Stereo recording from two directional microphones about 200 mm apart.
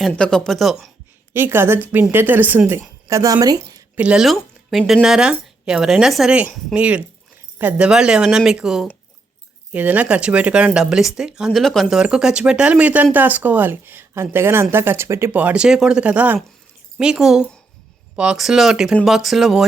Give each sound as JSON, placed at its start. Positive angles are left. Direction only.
{"t": 0.0, "sound": "speech", "side_deg": 5}
{"t": 1.3, "sound": "a woman's voice", "side_deg": -10}
{"t": 3.9, "sound": "speech", "side_deg": -5}